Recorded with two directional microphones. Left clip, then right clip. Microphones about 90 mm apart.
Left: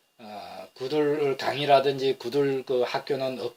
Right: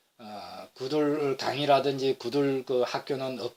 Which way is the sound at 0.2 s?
40° right (ahead or behind).